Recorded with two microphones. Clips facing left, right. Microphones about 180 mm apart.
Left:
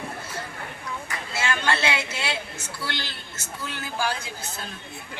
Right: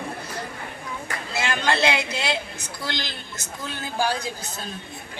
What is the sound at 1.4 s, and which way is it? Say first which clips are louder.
A woman's voice: right 2 dB; 15° right (ahead or behind).